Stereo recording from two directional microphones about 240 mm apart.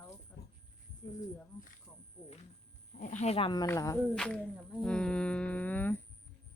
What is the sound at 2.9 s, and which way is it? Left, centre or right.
Speech, left.